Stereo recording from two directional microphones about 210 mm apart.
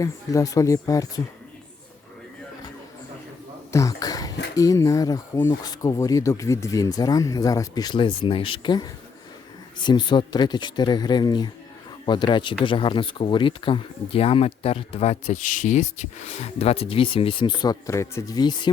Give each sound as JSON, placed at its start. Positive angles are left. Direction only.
{"t": 0.0, "sound": "speech", "side_deg": 15}
{"t": 3.7, "sound": "a sound", "side_deg": 15}
{"t": 4.5, "sound": "speech", "side_deg": 15}